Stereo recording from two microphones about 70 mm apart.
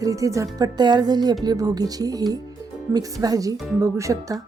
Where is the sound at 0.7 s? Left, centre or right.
Right.